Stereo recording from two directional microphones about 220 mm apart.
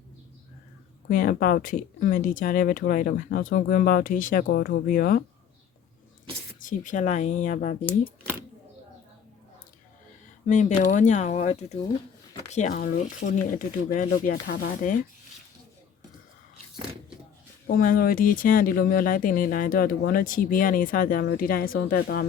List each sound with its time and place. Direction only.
1.1 s speech: 40° left (ahead or behind)
6.6 s speech: 35° left (ahead or behind)
10.4 s speech: 35° left (ahead or behind)
17.7 s speech: 40° left (ahead or behind)